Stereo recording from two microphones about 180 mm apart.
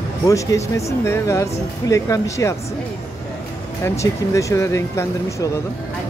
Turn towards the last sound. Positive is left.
turn(degrees=15)  # may be behind; listen again after turning